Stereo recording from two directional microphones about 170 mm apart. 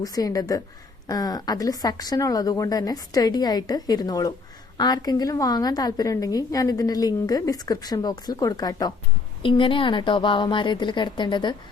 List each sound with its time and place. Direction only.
0.0 s a woman's voice: 20° left (ahead or behind)